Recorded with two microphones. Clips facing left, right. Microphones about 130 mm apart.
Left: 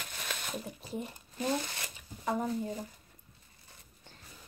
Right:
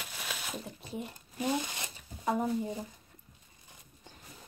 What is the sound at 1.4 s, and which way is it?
Shuffling cards, 15° right (ahead or behind).